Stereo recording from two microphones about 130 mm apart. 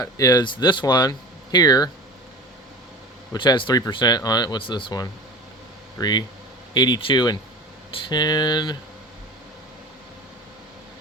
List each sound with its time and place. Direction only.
0.0 s speech: 25° left (ahead or behind)
3.3 s speech: 35° left (ahead or behind)